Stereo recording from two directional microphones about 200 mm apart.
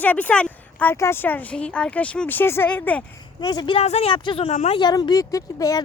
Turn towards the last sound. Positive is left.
turn(degrees=15)  # may be behind; listen again after turning